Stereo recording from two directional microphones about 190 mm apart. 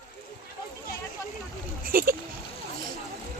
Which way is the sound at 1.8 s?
45° right (ahead or behind).